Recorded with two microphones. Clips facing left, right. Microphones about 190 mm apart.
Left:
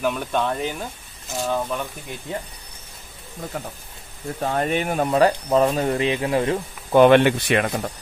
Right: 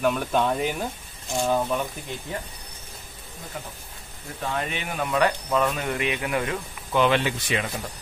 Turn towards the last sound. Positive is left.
turn(degrees=60)  # may be behind; listen again after turning